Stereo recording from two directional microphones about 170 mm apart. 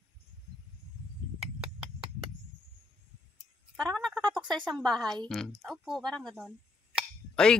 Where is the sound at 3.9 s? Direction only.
5° left (ahead or behind).